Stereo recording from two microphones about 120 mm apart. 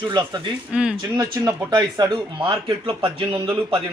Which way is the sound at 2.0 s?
35° right (ahead or behind).